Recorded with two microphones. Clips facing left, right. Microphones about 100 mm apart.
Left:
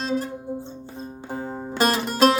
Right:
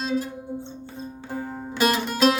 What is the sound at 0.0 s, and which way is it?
Music, 45° left (ahead or behind).